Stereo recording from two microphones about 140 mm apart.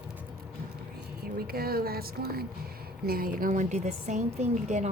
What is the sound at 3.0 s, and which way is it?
A woman's voice, 90° right.